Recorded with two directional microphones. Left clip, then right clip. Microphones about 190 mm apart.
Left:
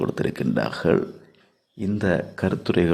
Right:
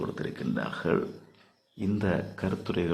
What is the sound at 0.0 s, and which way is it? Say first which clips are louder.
Speech: left 9 dB; 35° left (ahead or behind).